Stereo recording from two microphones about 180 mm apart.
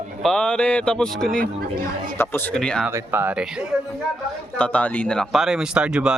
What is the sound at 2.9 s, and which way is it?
Speech, 10° right (ahead or behind).